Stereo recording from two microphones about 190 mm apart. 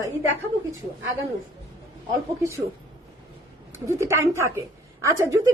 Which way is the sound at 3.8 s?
15° right (ahead or behind).